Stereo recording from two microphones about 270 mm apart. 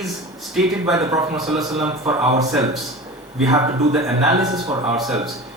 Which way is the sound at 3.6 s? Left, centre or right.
Right.